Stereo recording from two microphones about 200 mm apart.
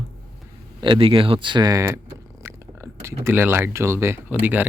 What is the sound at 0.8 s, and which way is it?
Speech, 25° right (ahead or behind).